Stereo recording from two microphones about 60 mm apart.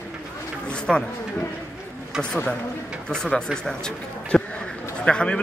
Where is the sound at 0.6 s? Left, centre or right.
Centre.